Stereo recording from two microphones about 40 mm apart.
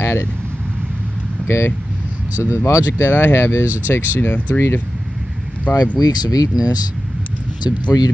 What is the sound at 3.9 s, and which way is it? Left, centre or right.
Speech, left.